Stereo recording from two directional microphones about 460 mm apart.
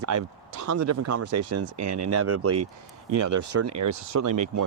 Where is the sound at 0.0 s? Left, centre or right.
Right.